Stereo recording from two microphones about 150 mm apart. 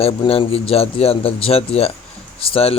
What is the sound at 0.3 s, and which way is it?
Speech, 40° left (ahead or behind).